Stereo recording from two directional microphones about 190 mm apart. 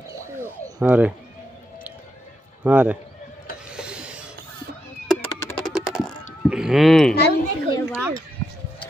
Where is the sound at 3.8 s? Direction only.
5° right (ahead or behind).